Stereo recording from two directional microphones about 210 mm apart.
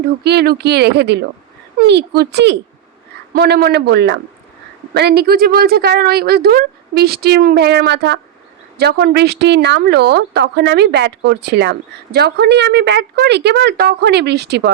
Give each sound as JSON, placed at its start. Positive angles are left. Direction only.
{"t": 0.0, "sound": "a woman's voice", "side_deg": -50}